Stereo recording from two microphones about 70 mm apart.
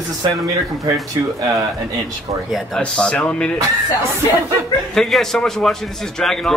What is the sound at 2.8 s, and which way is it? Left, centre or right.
Speech, centre.